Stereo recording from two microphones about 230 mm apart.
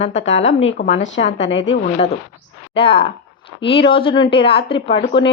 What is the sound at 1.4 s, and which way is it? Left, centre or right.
Speech, left.